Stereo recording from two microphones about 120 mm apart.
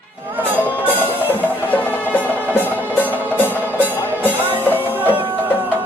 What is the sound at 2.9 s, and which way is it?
Music, 15° right (ahead or behind).